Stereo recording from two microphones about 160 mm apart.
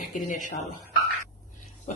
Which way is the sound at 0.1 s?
50° left (ahead or behind).